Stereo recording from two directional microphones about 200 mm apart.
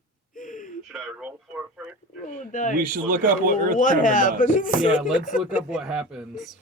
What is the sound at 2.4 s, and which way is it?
Speech, 40° left (ahead or behind).